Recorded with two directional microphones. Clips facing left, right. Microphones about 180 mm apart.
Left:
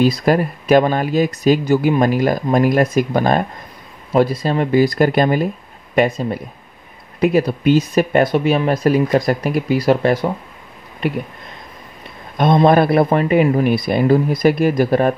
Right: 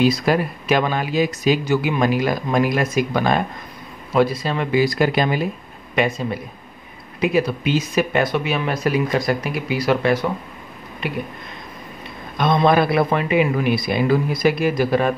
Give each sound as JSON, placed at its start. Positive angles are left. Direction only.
{"t": 0.0, "sound": "speech", "side_deg": 45}
{"t": 12.4, "sound": "speech", "side_deg": 45}